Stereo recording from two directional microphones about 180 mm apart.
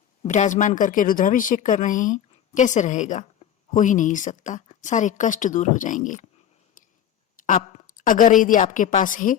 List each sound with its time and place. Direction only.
0.2 s speech: 40° left (ahead or behind)
6.8 s a sound: 45° left (ahead or behind)
7.4 s a woman's voice: 45° left (ahead or behind)